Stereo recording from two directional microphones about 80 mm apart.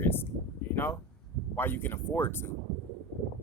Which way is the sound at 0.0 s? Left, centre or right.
Left.